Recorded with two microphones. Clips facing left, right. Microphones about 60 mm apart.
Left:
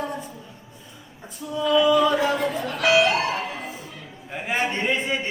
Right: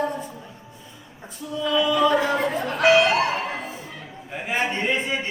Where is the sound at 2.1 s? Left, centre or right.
Right.